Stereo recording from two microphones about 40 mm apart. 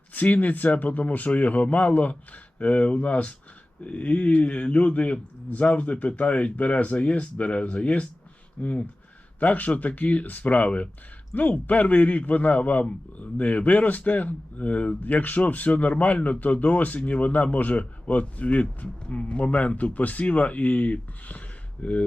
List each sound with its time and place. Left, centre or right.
0.1 s a man's voice: left